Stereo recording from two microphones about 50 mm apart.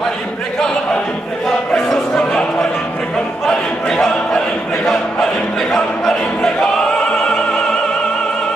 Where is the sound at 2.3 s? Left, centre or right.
Centre.